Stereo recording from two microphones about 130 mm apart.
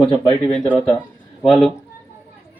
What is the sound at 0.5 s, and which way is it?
Speech, 15° left (ahead or behind).